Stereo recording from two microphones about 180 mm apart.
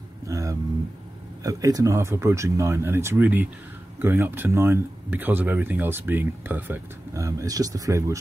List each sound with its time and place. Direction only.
0.3 s speech: 20° right (ahead or behind)